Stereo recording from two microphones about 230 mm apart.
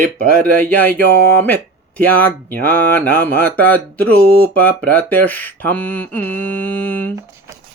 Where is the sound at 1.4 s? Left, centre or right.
Centre.